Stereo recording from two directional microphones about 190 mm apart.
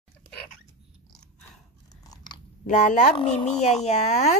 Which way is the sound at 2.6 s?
40° left (ahead or behind).